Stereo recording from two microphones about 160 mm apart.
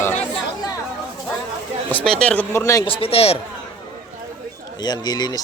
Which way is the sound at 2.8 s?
35° left (ahead or behind).